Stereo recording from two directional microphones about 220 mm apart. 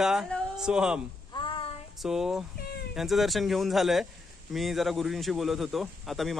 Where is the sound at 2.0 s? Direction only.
Centre (ahead or behind).